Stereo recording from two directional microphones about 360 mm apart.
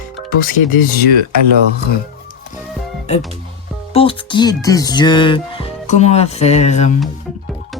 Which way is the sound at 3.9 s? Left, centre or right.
Centre.